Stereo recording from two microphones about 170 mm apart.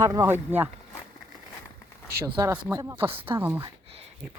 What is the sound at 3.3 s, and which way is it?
Speech, 15° right (ahead or behind).